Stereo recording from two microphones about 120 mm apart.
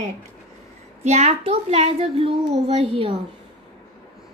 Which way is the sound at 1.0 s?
65° right (ahead or behind).